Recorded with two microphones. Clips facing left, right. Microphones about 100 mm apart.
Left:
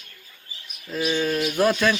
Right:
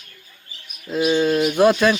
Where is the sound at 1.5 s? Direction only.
20° right (ahead or behind).